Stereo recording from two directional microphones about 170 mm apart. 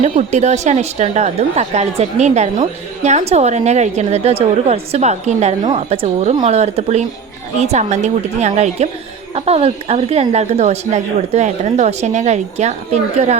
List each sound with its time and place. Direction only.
0.0 s a woman's voice: 40° right (ahead or behind)